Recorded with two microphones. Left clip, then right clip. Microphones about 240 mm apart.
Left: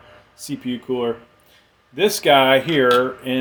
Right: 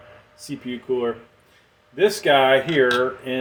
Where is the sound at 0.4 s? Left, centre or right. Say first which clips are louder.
Left 2 dB; left.